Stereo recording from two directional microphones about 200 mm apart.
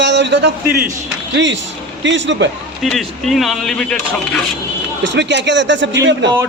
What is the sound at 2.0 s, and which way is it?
Speech, 65° right (ahead or behind).